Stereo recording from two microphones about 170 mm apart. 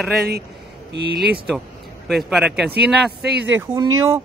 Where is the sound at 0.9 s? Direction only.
85° right.